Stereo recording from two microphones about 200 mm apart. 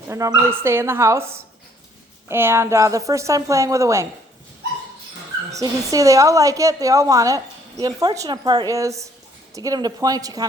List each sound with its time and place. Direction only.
0.1 s a woman's voice: 15° right (ahead or behind)
5.5 s a woman's voice: 15° right (ahead or behind)